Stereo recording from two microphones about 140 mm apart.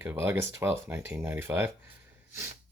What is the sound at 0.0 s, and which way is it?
Speech, 15° right (ahead or behind).